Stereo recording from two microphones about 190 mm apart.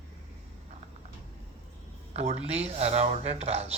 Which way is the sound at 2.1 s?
35° right (ahead or behind).